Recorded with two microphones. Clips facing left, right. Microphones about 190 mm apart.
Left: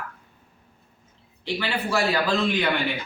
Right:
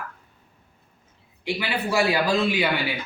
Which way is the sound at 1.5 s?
15° right (ahead or behind).